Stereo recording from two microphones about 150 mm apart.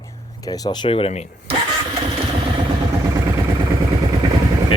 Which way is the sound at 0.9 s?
40° left (ahead or behind).